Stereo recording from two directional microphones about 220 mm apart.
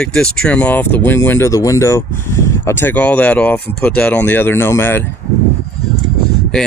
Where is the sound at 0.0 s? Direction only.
5° left (ahead or behind).